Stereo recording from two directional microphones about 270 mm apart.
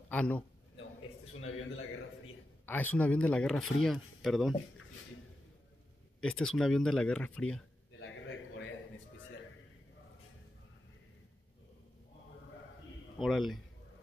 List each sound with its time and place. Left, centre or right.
0.1 s speech: centre
1.4 s a man's voice: left
2.6 s speech: centre
6.2 s speech: centre
8.0 s a sound: left
13.2 s speech: centre